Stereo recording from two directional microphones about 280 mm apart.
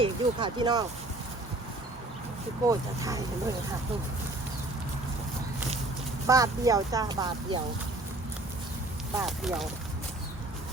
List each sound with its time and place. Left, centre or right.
0.0 s speech: centre
2.6 s speech: centre
6.2 s speech: centre
9.1 s speech: centre